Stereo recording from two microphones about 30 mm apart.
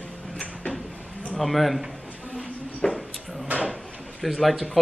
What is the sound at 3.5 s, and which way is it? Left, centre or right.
Drawer open or close, right.